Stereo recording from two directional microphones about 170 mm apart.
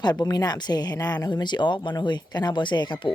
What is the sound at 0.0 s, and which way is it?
Speech, 25° left (ahead or behind).